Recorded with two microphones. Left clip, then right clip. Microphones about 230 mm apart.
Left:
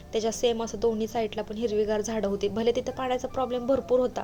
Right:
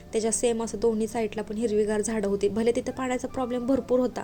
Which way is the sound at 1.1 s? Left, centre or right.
Right.